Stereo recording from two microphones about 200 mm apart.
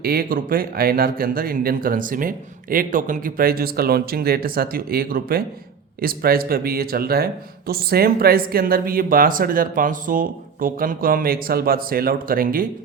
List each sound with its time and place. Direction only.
0.0 s a man's voice: 45° right (ahead or behind)